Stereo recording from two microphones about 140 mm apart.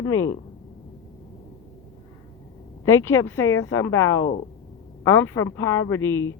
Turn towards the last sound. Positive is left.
turn(degrees=20)  # may be behind; listen again after turning